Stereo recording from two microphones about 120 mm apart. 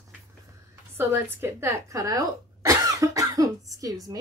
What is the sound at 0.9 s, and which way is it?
Speech, 20° right (ahead or behind).